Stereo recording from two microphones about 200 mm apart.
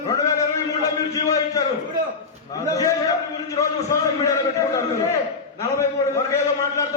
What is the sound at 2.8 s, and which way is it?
A man's voice, 15° left (ahead or behind).